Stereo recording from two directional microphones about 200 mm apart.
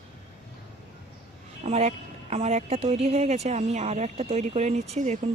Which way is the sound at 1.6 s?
35° right (ahead or behind).